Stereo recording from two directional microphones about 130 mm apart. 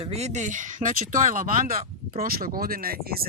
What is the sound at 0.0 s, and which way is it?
Speech, 55° right (ahead or behind).